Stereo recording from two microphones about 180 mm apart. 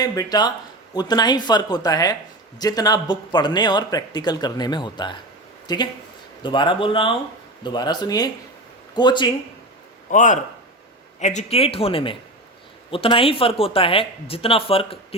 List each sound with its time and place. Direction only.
0.0 s speech: 20° left (ahead or behind)
10.1 s a man's voice: 45° left (ahead or behind)